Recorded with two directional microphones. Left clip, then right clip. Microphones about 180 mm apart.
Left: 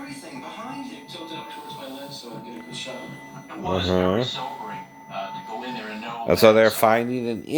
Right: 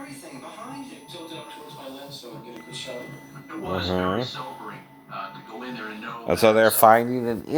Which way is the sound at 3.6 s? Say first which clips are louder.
Left 4 dB; 35° left (ahead or behind).